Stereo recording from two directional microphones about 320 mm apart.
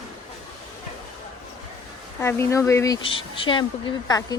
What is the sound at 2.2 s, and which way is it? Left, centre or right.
Speech, centre.